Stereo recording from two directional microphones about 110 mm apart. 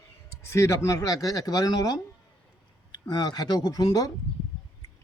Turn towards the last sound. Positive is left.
turn(degrees=35)  # may be behind; listen again after turning